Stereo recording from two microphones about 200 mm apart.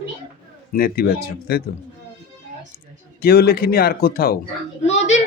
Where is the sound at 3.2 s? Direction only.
50° left (ahead or behind).